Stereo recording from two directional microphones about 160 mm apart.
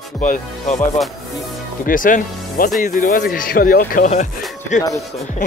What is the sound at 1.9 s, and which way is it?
Speech, 55° left (ahead or behind).